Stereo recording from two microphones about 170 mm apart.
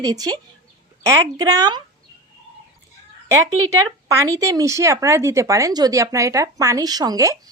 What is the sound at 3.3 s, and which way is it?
Speech, 15° right (ahead or behind).